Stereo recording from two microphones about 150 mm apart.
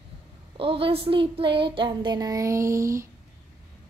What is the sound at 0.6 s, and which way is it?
A woman's voice, 40° right (ahead or behind).